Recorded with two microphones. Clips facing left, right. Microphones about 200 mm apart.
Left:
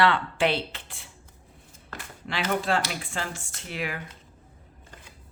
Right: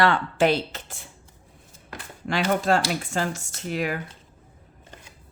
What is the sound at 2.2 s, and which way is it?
A woman's voice, 45° right (ahead or behind).